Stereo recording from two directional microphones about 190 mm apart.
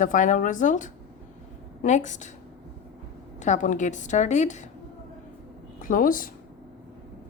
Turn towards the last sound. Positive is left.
turn(degrees=45)  # may be behind; listen again after turning